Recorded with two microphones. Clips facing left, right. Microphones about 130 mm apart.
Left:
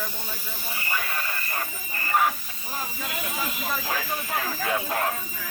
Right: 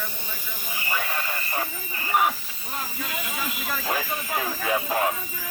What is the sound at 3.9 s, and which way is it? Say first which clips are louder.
Speech: right 1 dB; 10° right (ahead or behind).